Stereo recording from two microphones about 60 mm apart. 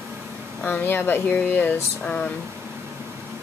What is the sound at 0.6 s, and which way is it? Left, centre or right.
A woman's voice, left.